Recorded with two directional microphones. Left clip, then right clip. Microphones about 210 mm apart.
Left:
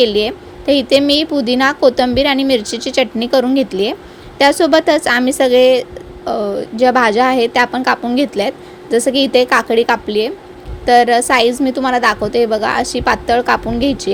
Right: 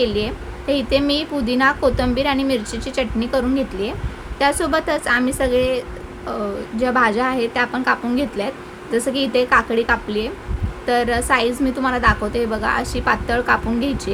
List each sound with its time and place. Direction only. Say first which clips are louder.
0.0 s a woman's voice: left 7 dB; 30° left (ahead or behind)